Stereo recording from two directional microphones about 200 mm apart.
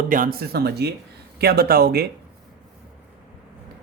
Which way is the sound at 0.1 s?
45° right (ahead or behind).